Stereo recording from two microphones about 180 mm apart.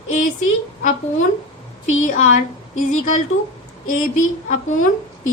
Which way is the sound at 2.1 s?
45° left (ahead or behind).